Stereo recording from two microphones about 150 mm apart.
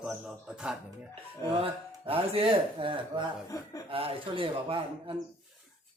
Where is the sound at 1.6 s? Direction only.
40° right (ahead or behind).